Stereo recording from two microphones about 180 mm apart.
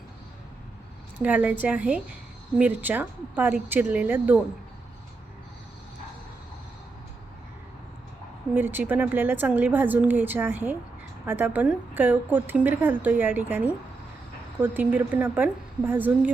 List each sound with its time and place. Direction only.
1.2 s a woman's voice: 10° right (ahead or behind)
8.5 s a woman's voice: 10° right (ahead or behind)
14.6 s a woman's voice: 10° right (ahead or behind)